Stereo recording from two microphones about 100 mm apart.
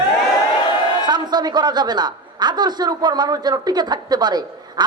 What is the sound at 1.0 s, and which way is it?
A man's voice, 45° right (ahead or behind).